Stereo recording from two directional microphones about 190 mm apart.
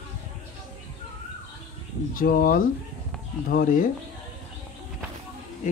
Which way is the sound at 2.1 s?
50° left (ahead or behind).